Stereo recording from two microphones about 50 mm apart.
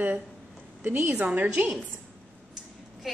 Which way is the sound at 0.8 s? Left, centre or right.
Right.